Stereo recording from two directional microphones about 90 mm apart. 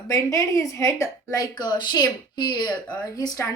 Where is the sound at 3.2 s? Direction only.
40° left (ahead or behind).